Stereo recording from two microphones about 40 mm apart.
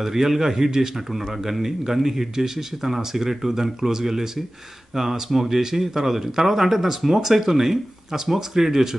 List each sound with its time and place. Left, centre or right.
0.0 s speech: centre